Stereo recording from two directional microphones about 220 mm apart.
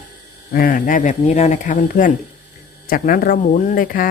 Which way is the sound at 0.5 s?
40° left (ahead or behind).